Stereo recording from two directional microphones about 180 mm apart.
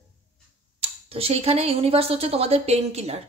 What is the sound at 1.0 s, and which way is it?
Speech, 35° right (ahead or behind).